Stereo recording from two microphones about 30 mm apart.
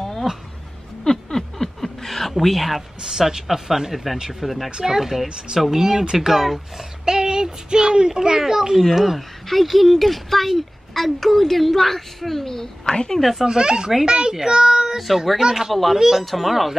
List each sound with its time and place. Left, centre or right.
0.3 s speech: centre
1.0 s a sound: centre
3.0 s a child's voice: centre
3.9 s a woman's voice: centre
7.1 s a child's voice: right; by 12.9 s centre
13.2 s a woman's voice: centre
13.5 s a child's voice: right
15.3 s speech: centre
15.7 s a woman's voice: centre
16.0 s a woman's voice: centre